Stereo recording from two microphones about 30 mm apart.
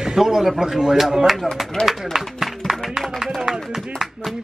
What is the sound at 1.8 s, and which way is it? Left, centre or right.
Speech, left.